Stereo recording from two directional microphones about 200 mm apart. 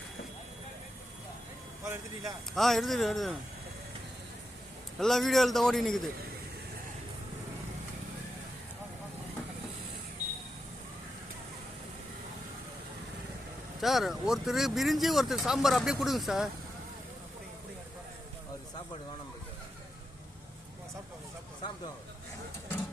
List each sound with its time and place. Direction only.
1.8 s speech: 15° right (ahead or behind)
2.6 s speech: centre (ahead or behind)
4.9 s speech: centre (ahead or behind)
13.8 s speech: centre (ahead or behind)